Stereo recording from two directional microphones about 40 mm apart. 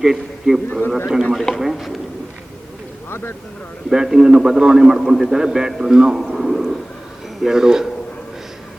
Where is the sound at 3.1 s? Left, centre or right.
Left.